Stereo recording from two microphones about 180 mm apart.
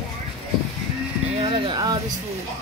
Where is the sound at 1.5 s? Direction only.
25° right (ahead or behind).